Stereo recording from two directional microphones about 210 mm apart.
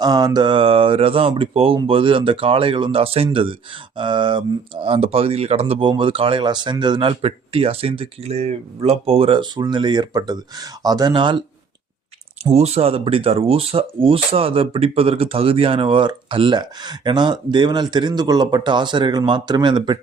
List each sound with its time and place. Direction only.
0.0 s speech: 20° right (ahead or behind)